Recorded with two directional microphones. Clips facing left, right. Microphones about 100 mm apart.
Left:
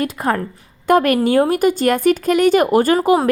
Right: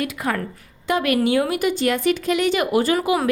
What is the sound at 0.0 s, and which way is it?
Speech, 40° left (ahead or behind).